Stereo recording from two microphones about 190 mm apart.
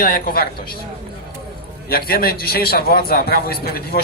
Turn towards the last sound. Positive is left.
turn(degrees=55)  # may be behind; listen again after turning